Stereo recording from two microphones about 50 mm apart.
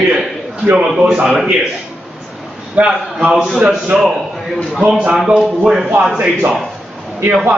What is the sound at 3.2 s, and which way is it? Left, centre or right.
Speech, centre.